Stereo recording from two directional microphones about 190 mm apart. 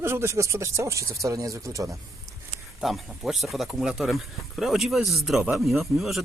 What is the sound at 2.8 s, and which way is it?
Speech, centre (ahead or behind).